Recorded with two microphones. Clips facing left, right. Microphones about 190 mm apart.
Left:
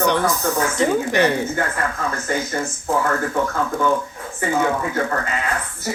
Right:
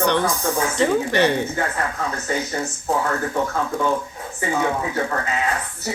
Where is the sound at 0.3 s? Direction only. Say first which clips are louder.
Left 2 dB; 30° right (ahead or behind).